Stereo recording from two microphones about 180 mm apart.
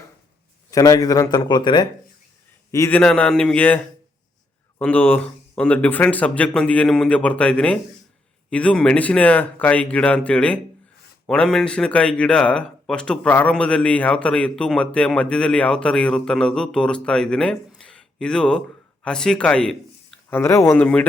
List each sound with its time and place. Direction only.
0.7 s a man's voice: 20° left (ahead or behind)
3.0 s speech: 5° left (ahead or behind)
4.8 s speech: 10° left (ahead or behind)
17.7 s a sound: 5° left (ahead or behind)
19.0 s speech: 5° left (ahead or behind)